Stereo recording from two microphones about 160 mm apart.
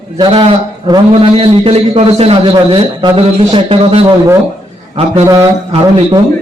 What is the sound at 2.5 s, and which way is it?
A man's voice, 25° right (ahead or behind).